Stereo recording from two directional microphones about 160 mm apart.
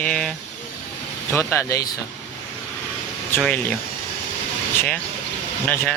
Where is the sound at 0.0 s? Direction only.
5° left (ahead or behind).